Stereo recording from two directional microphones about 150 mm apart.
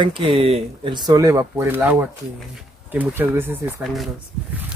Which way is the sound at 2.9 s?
15° right (ahead or behind).